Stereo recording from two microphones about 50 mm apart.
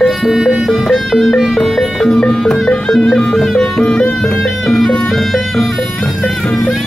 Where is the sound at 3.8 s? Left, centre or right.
Left.